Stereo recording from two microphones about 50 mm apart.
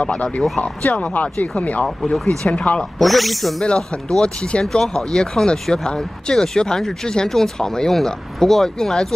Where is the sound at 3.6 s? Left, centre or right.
Centre.